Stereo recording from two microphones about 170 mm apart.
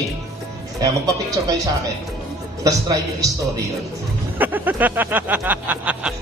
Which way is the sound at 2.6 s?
20° right (ahead or behind).